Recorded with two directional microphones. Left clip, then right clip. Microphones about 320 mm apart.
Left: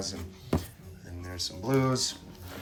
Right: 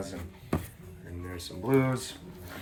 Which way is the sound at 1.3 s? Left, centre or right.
Centre.